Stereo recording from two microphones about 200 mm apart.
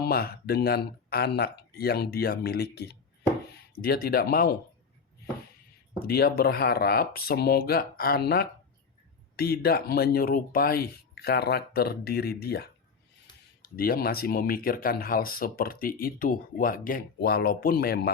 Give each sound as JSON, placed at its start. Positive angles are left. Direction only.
{"t": 0.0, "sound": "speech", "side_deg": 50}
{"t": 6.1, "sound": "speech", "side_deg": 50}